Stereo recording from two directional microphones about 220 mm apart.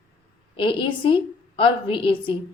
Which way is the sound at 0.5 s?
20° left (ahead or behind).